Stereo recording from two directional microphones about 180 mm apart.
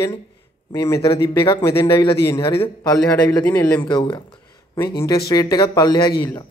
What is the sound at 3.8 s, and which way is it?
Speech, 25° left (ahead or behind).